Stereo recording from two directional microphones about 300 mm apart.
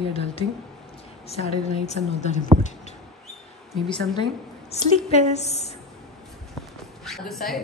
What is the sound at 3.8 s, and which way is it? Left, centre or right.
A woman's voice, centre.